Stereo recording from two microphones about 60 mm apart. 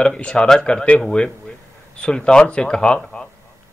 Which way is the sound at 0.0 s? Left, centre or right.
Centre.